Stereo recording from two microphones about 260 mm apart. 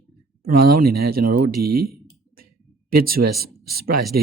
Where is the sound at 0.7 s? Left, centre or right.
Right.